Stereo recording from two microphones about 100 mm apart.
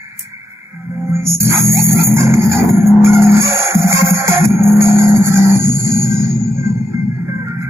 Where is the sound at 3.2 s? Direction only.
30° right (ahead or behind).